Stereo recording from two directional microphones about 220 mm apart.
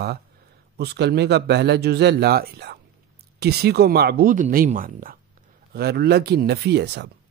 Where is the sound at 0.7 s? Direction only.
50° right (ahead or behind).